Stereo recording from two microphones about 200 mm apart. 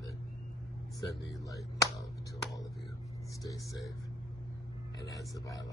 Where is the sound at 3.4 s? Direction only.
15° left (ahead or behind).